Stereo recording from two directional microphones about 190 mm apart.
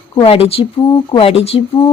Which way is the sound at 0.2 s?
30° left (ahead or behind).